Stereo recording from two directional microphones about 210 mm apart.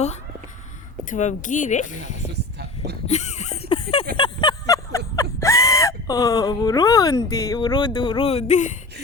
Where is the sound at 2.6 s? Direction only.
50° right (ahead or behind).